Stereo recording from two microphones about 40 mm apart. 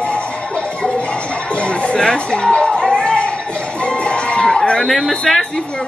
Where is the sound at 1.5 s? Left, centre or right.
Left.